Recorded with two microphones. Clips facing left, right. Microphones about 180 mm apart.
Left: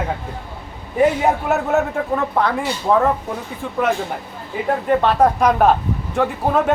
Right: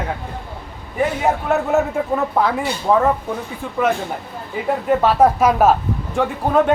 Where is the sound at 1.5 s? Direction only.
Centre (ahead or behind).